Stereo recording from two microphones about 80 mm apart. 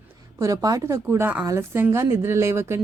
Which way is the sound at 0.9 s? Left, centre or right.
Right.